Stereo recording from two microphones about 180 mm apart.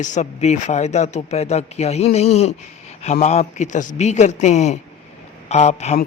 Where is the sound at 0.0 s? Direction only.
40° left (ahead or behind).